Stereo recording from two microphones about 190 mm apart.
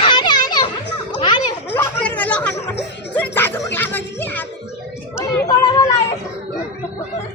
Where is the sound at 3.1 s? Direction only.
10° left (ahead or behind).